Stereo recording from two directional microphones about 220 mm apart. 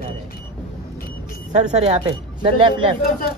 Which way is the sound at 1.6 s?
20° right (ahead or behind).